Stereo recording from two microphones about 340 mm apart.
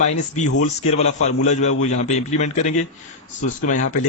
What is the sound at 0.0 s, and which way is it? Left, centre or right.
A man's voice, left.